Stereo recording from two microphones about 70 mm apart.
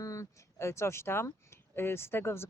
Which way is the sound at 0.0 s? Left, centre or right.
Left.